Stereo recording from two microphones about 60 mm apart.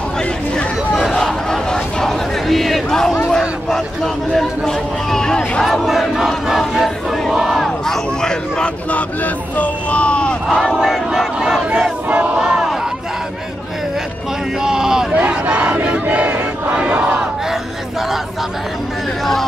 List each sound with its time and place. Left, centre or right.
0.9 s a sound: centre
3.3 s speech: centre
6.7 s crowd: centre
7.3 s battle cry: centre
8.9 s battle cry: left
10.6 s battle cry: centre
14.6 s a sound: centre
15.1 s battle cry: right